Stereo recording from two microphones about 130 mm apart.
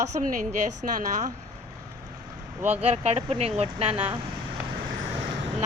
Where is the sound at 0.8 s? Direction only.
85° right.